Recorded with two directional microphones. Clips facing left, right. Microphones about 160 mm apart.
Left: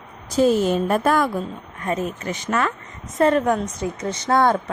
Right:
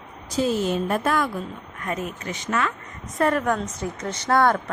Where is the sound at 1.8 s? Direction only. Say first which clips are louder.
Left 5 dB; 30° left (ahead or behind).